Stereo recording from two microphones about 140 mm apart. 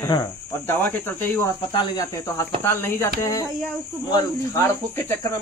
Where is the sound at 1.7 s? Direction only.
30° left (ahead or behind).